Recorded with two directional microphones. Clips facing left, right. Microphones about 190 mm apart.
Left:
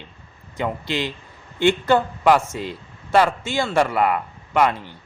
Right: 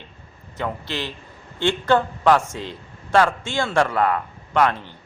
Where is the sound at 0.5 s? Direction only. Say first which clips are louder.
Left 3 dB; 15° left (ahead or behind).